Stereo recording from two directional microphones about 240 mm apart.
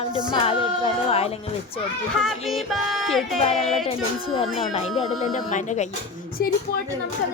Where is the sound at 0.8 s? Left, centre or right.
Left.